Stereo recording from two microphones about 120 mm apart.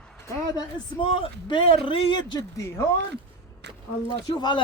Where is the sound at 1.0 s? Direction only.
50° left (ahead or behind).